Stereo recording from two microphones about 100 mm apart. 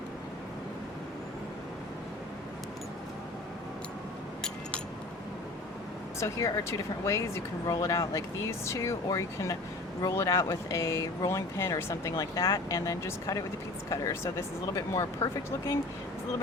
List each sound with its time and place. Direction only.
6.1 s speech: 30° left (ahead or behind)